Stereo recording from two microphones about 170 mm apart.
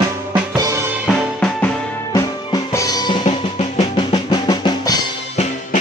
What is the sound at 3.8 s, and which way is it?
Drum, 25° left (ahead or behind).